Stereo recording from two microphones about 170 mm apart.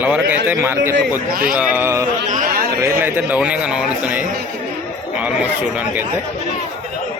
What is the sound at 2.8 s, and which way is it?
Speech, 15° right (ahead or behind).